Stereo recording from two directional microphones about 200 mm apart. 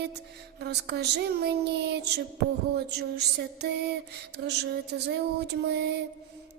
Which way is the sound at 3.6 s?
55° right (ahead or behind).